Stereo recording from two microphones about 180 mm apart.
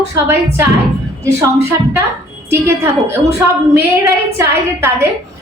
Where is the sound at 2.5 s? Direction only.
15° right (ahead or behind).